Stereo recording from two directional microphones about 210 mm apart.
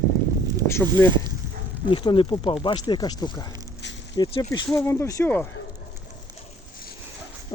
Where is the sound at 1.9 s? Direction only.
25° left (ahead or behind).